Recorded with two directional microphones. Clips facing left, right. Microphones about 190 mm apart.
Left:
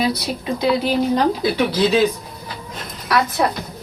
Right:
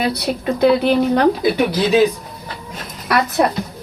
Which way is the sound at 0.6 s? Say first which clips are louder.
Right 5 dB; 60° right (ahead or behind).